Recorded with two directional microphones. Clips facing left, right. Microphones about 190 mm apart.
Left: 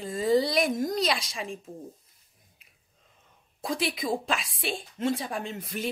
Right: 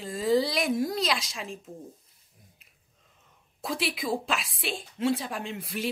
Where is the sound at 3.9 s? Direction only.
5° right (ahead or behind).